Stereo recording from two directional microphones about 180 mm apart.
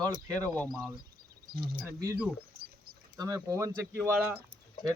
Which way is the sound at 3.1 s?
20° right (ahead or behind).